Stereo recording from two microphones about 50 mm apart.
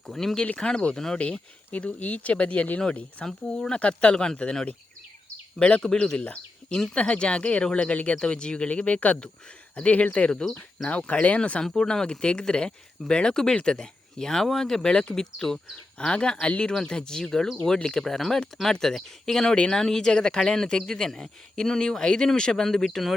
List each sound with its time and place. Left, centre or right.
0.1 s a man's voice: centre
0.4 s speech: left
0.9 s a man's voice: centre
1.2 s speech: left
3.5 s a man's voice: centre
11.6 s a man's voice: centre
15.7 s a man's voice: left; by 23.1 s centre